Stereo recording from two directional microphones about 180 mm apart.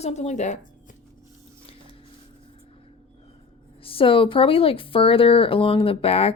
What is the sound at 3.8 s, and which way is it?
Speech, 30° left (ahead or behind).